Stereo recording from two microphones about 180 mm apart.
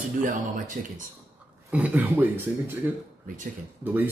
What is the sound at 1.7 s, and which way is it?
Speech, 10° right (ahead or behind).